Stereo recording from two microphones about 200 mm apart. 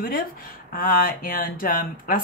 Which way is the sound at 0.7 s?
45° left (ahead or behind).